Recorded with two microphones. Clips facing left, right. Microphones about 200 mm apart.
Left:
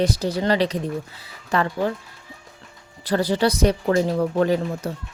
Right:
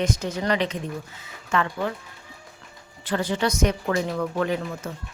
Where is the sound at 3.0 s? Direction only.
35° left (ahead or behind).